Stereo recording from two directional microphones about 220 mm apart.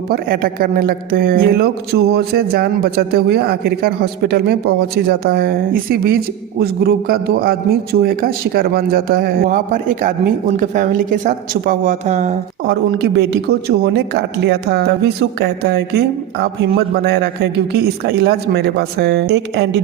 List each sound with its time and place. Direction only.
0.1 s a woman's voice: 40° right (ahead or behind)
12.6 s speech: 50° right (ahead or behind)